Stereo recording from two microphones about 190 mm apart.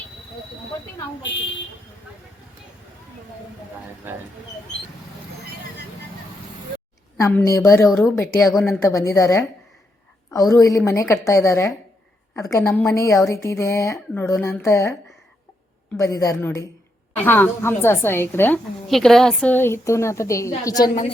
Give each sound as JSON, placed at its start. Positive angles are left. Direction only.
{"t": 4.0, "sound": "speech", "side_deg": -10}
{"t": 7.2, "sound": "a woman's voice", "side_deg": 15}
{"t": 7.9, "sound": "speech", "side_deg": 0}
{"t": 8.1, "sound": "a woman's voice", "side_deg": 15}
{"t": 8.5, "sound": "speech", "side_deg": 0}
{"t": 8.8, "sound": "a woman's voice", "side_deg": 15}
{"t": 10.5, "sound": "a woman's voice", "side_deg": 15}
{"t": 16.0, "sound": "a woman's voice", "side_deg": 15}